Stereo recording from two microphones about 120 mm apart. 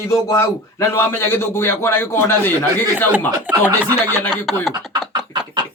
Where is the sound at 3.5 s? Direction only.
15° right (ahead or behind).